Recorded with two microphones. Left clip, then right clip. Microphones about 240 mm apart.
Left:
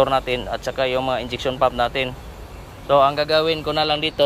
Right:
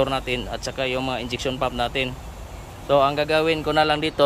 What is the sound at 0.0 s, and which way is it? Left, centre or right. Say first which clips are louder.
Speech: left 5 dB; centre.